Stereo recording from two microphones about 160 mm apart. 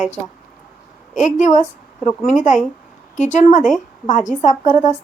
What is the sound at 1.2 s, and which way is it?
A woman's voice, 50° left (ahead or behind).